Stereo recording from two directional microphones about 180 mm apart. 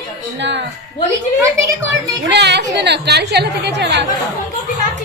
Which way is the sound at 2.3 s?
70° right (ahead or behind).